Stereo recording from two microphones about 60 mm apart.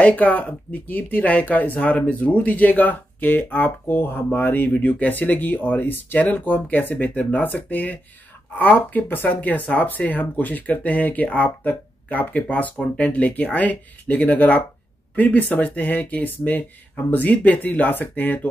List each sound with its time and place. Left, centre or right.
0.0 s speech: left